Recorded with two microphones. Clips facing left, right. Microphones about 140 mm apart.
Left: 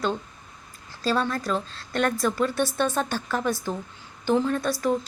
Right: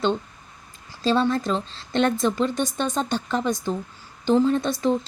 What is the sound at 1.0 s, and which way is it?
A woman's voice, 25° right (ahead or behind).